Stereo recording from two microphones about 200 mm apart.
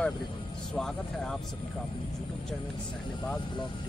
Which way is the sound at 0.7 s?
Centre (ahead or behind).